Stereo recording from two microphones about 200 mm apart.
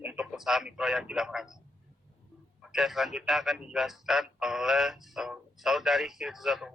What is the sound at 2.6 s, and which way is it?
A man's voice, centre (ahead or behind).